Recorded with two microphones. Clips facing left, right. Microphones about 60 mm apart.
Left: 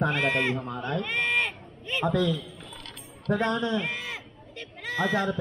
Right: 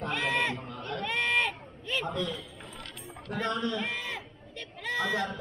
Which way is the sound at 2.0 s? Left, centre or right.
Left.